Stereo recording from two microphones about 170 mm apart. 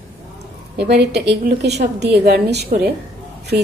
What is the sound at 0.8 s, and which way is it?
A woman's voice, 80° right.